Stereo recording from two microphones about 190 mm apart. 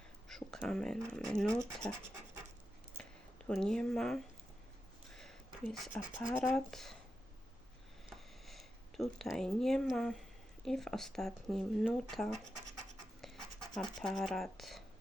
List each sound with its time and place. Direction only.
0.3 s speech: centre (ahead or behind)
3.0 s a sound: 5° left (ahead or behind)
6.5 s speech: centre (ahead or behind)
8.1 s a sound: centre (ahead or behind)
10.7 s speech: centre (ahead or behind)
13.2 s scratch: centre (ahead or behind)
14.0 s speech: centre (ahead or behind)